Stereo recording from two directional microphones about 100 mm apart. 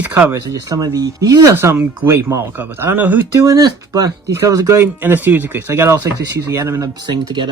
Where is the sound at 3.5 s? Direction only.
35° right (ahead or behind).